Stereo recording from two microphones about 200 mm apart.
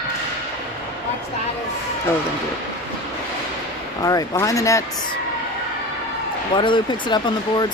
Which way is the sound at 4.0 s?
15° left (ahead or behind).